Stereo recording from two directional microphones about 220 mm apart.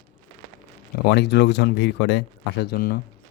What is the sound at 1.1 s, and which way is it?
Speech, 50° left (ahead or behind).